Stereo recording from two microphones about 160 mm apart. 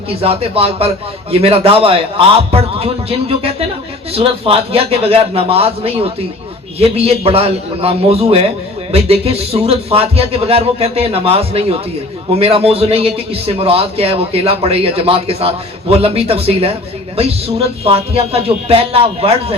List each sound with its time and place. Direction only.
0.1 s a man's voice: 35° right (ahead or behind)